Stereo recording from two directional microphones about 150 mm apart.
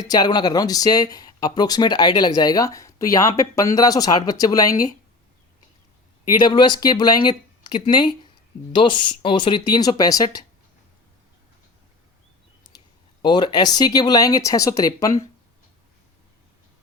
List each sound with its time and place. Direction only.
0.0 s speech: 25° left (ahead or behind)
6.4 s speech: 30° left (ahead or behind)
13.2 s speech: 30° left (ahead or behind)